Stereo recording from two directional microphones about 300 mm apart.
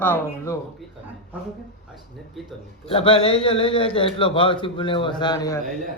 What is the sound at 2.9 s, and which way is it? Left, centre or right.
A man's voice, centre.